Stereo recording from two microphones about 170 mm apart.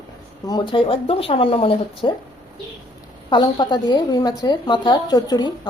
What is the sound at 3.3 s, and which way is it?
Speech, 25° left (ahead or behind).